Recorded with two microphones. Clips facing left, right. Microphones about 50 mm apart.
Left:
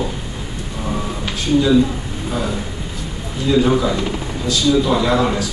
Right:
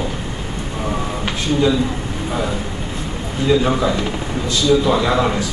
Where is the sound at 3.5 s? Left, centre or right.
Centre.